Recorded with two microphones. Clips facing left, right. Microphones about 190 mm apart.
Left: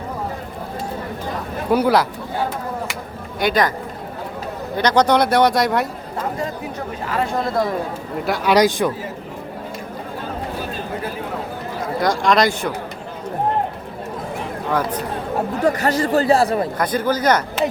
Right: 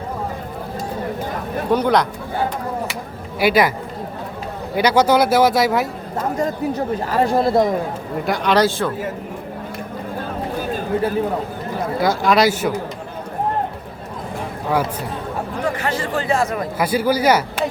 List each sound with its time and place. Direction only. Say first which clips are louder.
1.7 s speech: left 1 dB; 5° left (ahead or behind)
3.4 s speech: right 3 dB; 5° right (ahead or behind)
4.7 s a man's voice: right 1 dB; 10° right (ahead or behind)
7.1 s speech: right 4 dB; 35° right (ahead or behind)
8.3 s speech: left 1 dB; 10° left (ahead or behind)
11.9 s a man's voice: even; 5° right (ahead or behind)
14.7 s speech: right 1 dB; 10° right (ahead or behind)
15.6 s speech: left 5 dB; 40° left (ahead or behind)
16.7 s speech: right 2 dB; 10° right (ahead or behind)